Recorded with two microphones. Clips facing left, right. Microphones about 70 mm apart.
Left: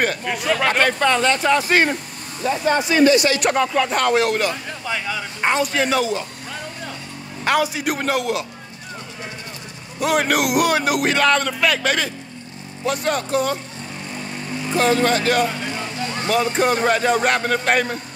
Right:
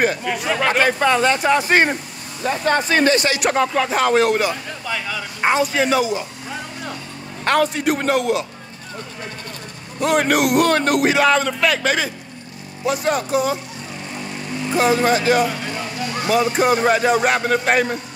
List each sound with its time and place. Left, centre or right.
0.0 s speech: centre; by 2.0 s right
2.4 s speech: right
3.3 s a man's voice: centre
7.4 s a man's voice: centre
9.9 s a man's voice: centre
14.7 s a man's voice: centre